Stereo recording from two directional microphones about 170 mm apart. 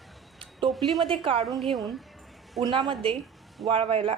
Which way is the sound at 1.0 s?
30° right (ahead or behind).